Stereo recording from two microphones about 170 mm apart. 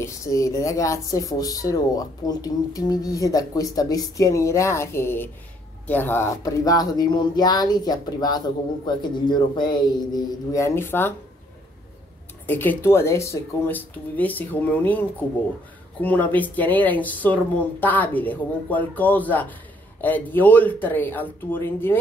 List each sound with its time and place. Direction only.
0.0 s speech: 20° left (ahead or behind)
12.4 s speech: 10° left (ahead or behind)